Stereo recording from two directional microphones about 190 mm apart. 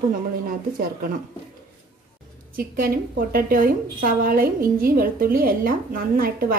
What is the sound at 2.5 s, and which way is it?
A woman's voice, 50° right (ahead or behind).